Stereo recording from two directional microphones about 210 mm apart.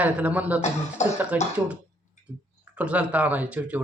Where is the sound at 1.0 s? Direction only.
35° left (ahead or behind).